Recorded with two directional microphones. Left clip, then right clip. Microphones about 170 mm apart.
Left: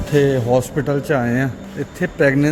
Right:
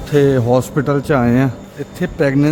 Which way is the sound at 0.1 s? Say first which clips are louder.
Right 3 dB; 25° right (ahead or behind).